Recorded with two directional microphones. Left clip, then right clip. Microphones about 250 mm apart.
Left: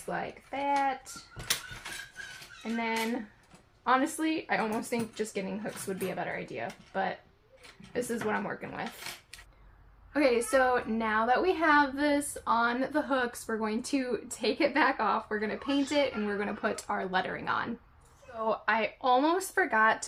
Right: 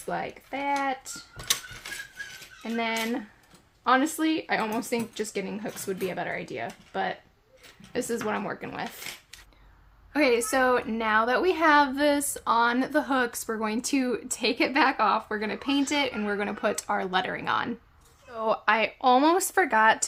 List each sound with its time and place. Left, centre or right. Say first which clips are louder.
0.1 s a woman's voice: right 3 dB; right
2.7 s a woman's voice: right 3 dB; right
10.1 s a woman's voice: right 3 dB; right